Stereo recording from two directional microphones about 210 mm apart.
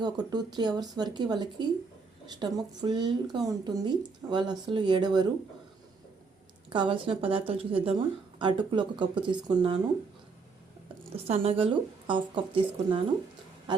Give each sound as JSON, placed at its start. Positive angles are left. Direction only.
{"t": 0.0, "sound": "a woman's voice", "side_deg": -20}
{"t": 6.7, "sound": "a woman's voice", "side_deg": -25}
{"t": 11.1, "sound": "a woman's voice", "side_deg": -30}